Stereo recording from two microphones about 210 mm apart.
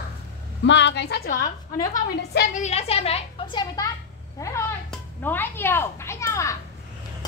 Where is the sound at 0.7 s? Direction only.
60° left (ahead or behind); by 6.5 s 15° left (ahead or behind).